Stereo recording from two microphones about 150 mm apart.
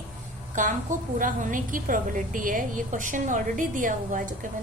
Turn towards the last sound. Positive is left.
turn(degrees=-60)  # may be behind; listen again after turning